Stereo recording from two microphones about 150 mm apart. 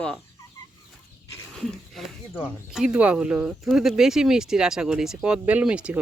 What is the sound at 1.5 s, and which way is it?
Speech, centre (ahead or behind).